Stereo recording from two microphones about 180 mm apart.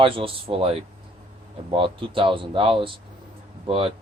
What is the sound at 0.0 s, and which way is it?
A man's voice, 30° right (ahead or behind).